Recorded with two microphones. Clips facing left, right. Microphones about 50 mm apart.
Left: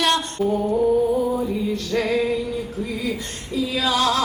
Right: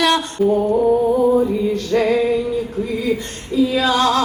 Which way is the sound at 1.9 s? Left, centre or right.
Centre.